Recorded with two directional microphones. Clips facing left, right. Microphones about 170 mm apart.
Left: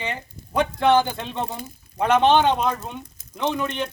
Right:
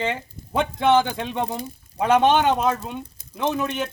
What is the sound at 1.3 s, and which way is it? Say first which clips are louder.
A man's voice: right 3 dB; 15° right (ahead or behind).